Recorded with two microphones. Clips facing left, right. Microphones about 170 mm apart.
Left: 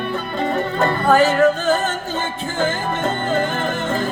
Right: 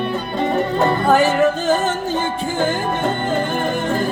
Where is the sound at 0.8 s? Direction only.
15° right (ahead or behind).